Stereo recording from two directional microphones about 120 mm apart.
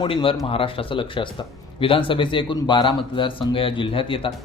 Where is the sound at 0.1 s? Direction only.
50° left (ahead or behind).